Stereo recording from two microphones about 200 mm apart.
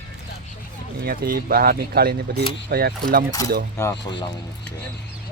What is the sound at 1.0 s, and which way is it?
Speech, 45° right (ahead or behind).